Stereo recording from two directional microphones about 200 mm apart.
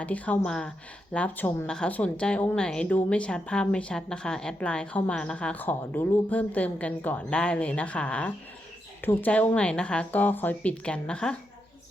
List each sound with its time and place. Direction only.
0.0 s speech: 5° left (ahead or behind)